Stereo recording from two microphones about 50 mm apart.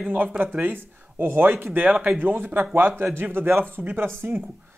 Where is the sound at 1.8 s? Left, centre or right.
Right.